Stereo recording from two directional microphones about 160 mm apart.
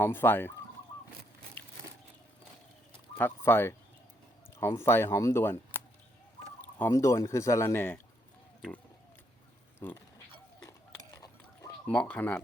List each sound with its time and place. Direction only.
0.0 s speech: 15° left (ahead or behind)
2.9 s fowl: 10° left (ahead or behind)
4.6 s speech: 15° left (ahead or behind)
9.8 s speech: 15° left (ahead or behind)
10.6 s a sound: 20° left (ahead or behind)
11.9 s speech: 10° left (ahead or behind)